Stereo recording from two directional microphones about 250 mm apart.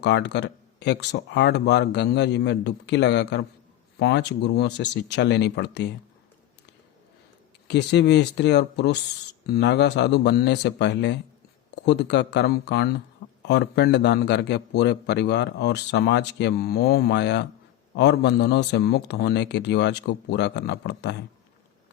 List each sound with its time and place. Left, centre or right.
0.0 s a man's voice: left
7.7 s a man's voice: left